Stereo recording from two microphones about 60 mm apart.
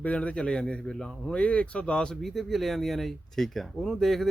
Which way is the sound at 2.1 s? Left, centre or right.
Centre.